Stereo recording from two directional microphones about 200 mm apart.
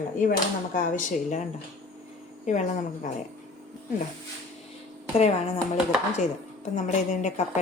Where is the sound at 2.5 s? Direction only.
35° left (ahead or behind).